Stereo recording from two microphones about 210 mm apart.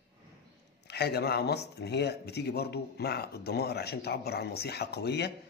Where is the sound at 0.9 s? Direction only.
50° left (ahead or behind).